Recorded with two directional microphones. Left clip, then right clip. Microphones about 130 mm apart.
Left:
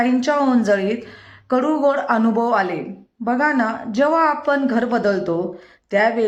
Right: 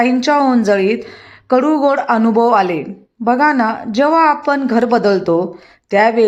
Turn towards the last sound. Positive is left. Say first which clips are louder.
# right 5 dB
turn(degrees=-30)  # may be behind; listen again after turning